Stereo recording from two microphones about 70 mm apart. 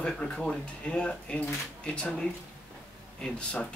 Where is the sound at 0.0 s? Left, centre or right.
Centre.